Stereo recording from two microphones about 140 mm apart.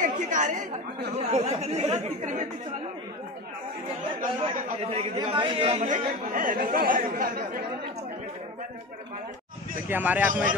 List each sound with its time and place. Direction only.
0.0 s chatter: 65° right (ahead or behind)
1.1 s speech: 50° right (ahead or behind)
5.1 s a man's voice: 35° right (ahead or behind)
5.8 s speech: 70° right (ahead or behind); by 7.6 s 90° right
9.8 s speech: 15° right (ahead or behind)